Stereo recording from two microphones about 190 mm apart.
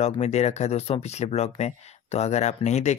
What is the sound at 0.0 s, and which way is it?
Speech, 35° left (ahead or behind).